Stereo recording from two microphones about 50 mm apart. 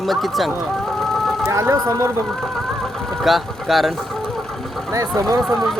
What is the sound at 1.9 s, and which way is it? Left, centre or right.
Speech, right.